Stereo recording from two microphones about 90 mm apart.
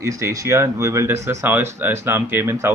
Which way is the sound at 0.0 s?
35° right (ahead or behind).